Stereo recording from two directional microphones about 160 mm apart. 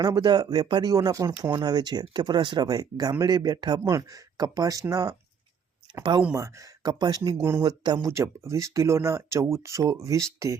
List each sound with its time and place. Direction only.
0.0 s speech: 25° right (ahead or behind)